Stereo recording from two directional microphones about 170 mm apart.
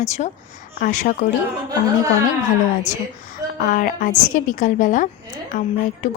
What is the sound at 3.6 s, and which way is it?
A woman's voice, 55° left (ahead or behind).